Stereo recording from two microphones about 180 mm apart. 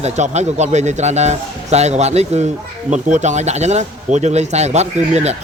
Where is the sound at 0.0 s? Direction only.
40° right (ahead or behind).